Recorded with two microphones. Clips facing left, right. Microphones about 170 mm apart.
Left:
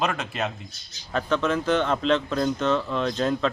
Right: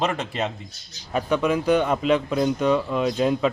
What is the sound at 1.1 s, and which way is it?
Speech, 10° right (ahead or behind).